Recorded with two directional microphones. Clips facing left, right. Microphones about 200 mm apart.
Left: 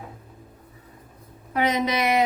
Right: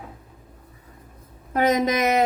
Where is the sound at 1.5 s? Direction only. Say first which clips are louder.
Right 3 dB; 45° right (ahead or behind).